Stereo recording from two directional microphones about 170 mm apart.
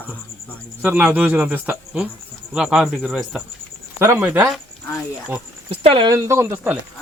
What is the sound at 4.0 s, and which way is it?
Speech, 10° right (ahead or behind).